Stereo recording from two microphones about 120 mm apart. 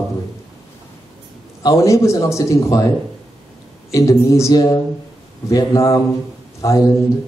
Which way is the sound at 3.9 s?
25° left (ahead or behind).